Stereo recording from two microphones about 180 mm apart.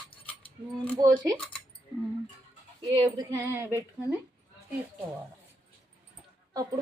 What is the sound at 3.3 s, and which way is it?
Speech, 15° right (ahead or behind).